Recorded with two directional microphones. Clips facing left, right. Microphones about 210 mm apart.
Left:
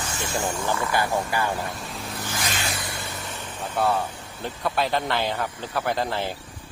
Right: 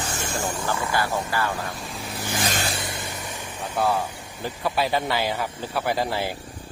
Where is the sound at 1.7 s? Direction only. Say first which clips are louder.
Even; centre (ahead or behind).